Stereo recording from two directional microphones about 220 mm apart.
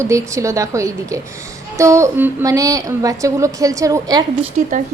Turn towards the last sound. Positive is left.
turn(degrees=-35)  # may be behind; listen again after turning